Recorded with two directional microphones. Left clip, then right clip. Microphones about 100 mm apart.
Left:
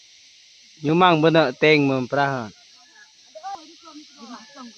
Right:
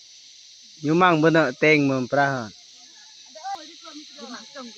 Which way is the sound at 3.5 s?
15° right (ahead or behind).